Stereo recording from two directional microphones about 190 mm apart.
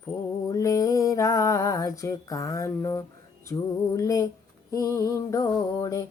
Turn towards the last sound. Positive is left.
turn(degrees=20)  # may be behind; listen again after turning